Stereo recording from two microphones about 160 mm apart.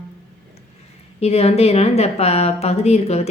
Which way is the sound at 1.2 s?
40° left (ahead or behind).